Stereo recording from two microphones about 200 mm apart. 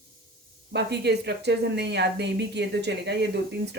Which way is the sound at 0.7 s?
60° right (ahead or behind).